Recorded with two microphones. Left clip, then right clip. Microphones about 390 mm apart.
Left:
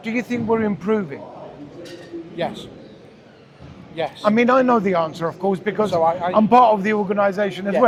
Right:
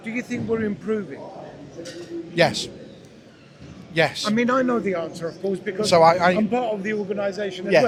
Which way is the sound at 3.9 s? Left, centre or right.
Right.